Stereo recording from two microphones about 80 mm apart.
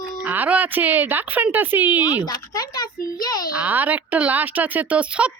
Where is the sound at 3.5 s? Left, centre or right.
Centre.